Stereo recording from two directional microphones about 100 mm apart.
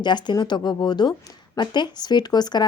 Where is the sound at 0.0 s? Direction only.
50° left (ahead or behind).